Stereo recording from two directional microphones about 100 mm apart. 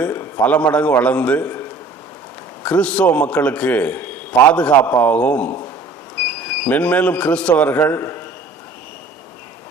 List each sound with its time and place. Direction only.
0.0 s a sound: 20° left (ahead or behind)
0.7 s a man's voice: 10° left (ahead or behind)
2.6 s a man's voice: 10° left (ahead or behind)